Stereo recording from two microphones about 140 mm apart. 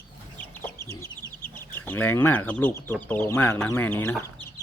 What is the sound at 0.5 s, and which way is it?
Chicken, 15° left (ahead or behind).